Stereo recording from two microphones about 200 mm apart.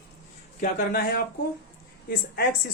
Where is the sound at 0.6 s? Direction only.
50° left (ahead or behind).